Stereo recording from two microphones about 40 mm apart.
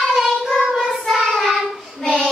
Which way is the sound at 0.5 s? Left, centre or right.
Centre.